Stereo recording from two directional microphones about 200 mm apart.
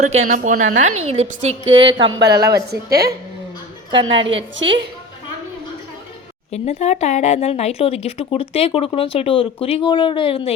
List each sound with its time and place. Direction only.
0.0 s a woman's voice: 35° right (ahead or behind); by 2.6 s 15° right (ahead or behind)
2.6 s a woman's voice: 50° right (ahead or behind)
4.1 s a woman's voice: 25° right (ahead or behind)
4.5 s a woman's voice: 65° right (ahead or behind)
6.5 s speech: 30° left (ahead or behind)